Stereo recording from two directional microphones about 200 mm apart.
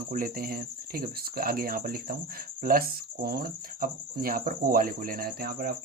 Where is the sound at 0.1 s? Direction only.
45° right (ahead or behind).